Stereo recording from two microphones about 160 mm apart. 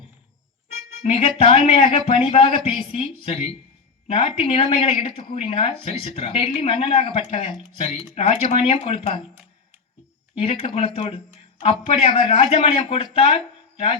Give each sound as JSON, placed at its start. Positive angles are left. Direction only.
{"t": 1.0, "sound": "speech", "side_deg": 35}
{"t": 10.3, "sound": "speech", "side_deg": 35}